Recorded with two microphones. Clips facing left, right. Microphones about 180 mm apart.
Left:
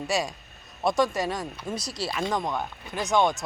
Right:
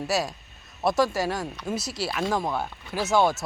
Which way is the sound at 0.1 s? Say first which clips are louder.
Even; 5° right (ahead or behind).